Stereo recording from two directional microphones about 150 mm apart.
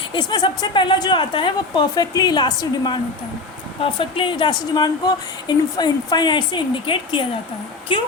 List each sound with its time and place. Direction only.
0.1 s a woman's voice: 30° left (ahead or behind)